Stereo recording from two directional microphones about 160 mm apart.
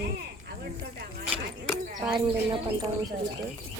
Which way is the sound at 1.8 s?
55° right (ahead or behind).